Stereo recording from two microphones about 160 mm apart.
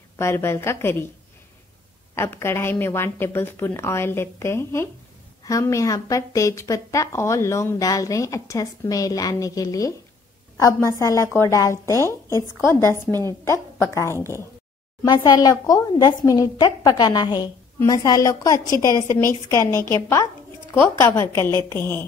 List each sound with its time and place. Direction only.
0.2 s a woman's voice: 15° left (ahead or behind)
2.1 s a woman's voice: 15° left (ahead or behind)